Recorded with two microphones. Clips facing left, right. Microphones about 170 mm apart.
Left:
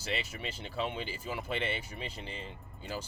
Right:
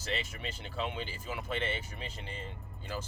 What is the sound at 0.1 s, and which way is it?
Speech, 10° left (ahead or behind).